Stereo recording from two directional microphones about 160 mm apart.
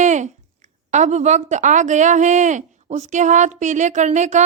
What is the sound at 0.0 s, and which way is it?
A woman's voice, 50° right (ahead or behind).